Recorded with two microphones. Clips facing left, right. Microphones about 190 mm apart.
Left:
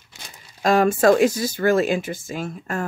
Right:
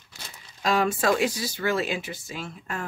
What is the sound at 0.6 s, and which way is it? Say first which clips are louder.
Speech: left 6 dB; 50° left (ahead or behind).